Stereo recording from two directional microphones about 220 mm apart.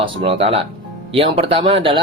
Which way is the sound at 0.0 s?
25° right (ahead or behind).